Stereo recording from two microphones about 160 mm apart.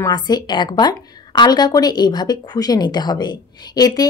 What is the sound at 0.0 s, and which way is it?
A woman's voice, 25° left (ahead or behind).